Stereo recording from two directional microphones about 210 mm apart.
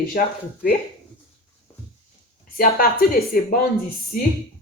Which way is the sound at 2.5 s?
45° left (ahead or behind).